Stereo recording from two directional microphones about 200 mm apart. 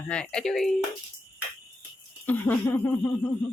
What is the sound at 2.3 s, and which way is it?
Speech, 10° left (ahead or behind).